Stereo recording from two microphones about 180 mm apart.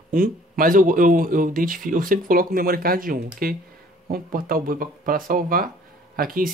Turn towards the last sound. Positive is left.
turn(degrees=-55)  # may be behind; listen again after turning